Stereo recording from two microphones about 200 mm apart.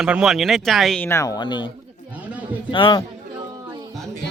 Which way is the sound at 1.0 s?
15° left (ahead or behind).